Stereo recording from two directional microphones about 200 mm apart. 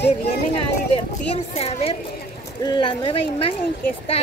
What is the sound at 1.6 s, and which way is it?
A woman's voice, 30° left (ahead or behind).